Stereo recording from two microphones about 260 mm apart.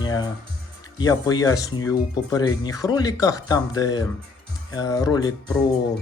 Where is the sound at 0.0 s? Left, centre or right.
Centre.